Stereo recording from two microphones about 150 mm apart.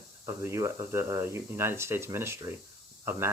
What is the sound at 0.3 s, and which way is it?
Speech, 20° right (ahead or behind).